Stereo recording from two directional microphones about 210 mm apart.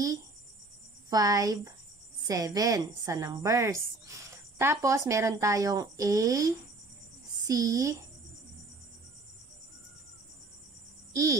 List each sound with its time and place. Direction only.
1.1 s a woman's voice: 15° right (ahead or behind)